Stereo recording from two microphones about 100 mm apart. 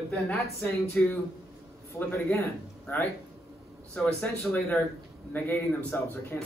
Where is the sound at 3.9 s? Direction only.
10° left (ahead or behind).